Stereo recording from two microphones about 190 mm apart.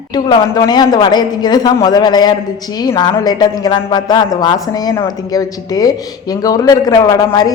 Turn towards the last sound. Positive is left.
turn(degrees=20)  # may be behind; listen again after turning